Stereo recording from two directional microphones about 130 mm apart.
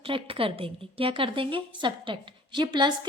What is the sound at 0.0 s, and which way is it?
A woman's voice, 45° right (ahead or behind).